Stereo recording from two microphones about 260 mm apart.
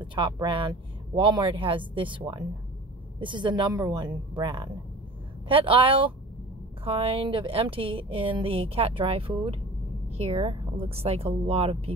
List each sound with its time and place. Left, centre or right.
0.0 s a woman's voice: centre